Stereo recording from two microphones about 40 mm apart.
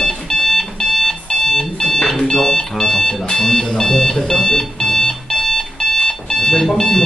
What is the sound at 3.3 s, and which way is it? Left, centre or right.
Alarm clock, centre.